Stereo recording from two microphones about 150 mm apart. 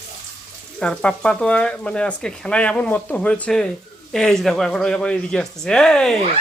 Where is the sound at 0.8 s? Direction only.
5° left (ahead or behind).